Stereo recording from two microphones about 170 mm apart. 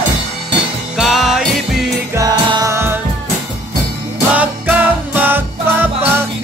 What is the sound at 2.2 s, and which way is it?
Music, 25° right (ahead or behind).